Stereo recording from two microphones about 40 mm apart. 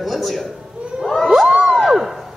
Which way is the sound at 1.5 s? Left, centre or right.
Centre.